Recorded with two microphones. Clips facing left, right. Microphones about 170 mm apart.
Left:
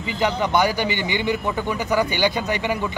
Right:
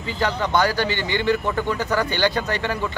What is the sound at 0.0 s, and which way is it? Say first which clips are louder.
A man's voice: left 2 dB; 15° left (ahead or behind).